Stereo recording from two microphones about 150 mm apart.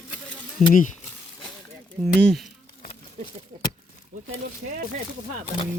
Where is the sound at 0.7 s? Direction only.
65° left (ahead or behind).